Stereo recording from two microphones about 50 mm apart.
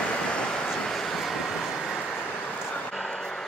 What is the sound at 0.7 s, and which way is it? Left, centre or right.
Vehicle, centre.